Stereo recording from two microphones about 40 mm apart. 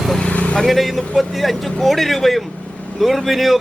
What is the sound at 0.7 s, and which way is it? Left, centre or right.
A man's voice, centre.